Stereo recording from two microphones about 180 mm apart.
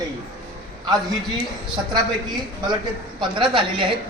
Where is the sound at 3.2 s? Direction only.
25° right (ahead or behind).